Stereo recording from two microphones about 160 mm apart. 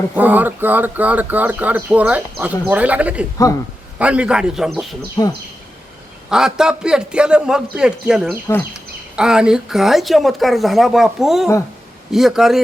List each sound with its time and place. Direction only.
0.2 s speech: 10° right (ahead or behind)
3.3 s speech: 20° left (ahead or behind)
3.9 s speech: 5° right (ahead or behind)
5.2 s speech: 25° left (ahead or behind)
6.3 s speech: 5° right (ahead or behind)